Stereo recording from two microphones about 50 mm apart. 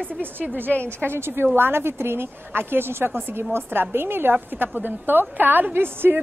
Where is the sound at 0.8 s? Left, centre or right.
Right.